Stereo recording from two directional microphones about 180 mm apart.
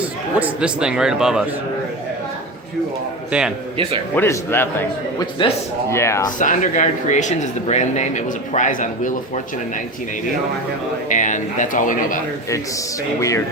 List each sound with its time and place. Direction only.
0.3 s a man's voice: 5° right (ahead or behind)
4.1 s a man's voice: 10° left (ahead or behind)
5.4 s speech: 25° left (ahead or behind)
5.9 s a man's voice: 15° left (ahead or behind)
6.4 s speech: 45° left (ahead or behind)
11.1 s speech: 45° left (ahead or behind)